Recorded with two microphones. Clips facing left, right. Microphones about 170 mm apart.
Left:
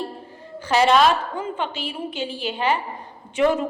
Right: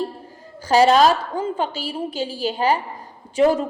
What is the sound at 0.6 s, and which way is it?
A woman's voice, 40° right (ahead or behind).